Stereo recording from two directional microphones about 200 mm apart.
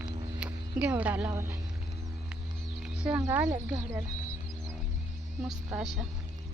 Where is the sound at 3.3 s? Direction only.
10° right (ahead or behind).